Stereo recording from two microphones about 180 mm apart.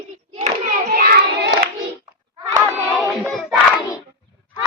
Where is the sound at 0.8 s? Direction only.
60° right (ahead or behind).